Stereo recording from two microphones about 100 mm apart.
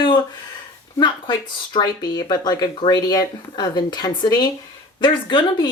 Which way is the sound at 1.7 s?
45° left (ahead or behind).